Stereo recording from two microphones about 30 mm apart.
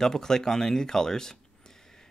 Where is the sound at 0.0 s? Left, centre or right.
Centre.